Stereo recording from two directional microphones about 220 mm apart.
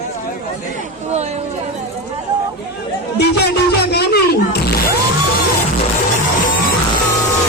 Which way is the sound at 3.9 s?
45° left (ahead or behind).